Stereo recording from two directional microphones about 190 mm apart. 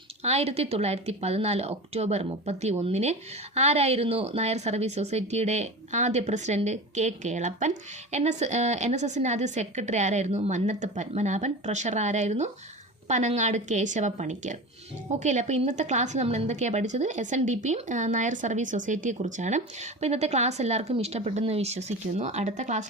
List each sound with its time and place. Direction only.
0.2 s speech: 35° right (ahead or behind)